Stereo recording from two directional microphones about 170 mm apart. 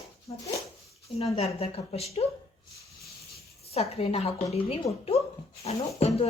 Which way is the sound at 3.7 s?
35° left (ahead or behind).